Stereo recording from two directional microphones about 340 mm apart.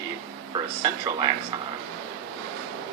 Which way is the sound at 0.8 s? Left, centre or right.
Centre.